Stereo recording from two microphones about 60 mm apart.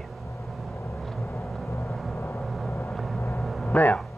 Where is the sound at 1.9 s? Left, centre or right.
Centre.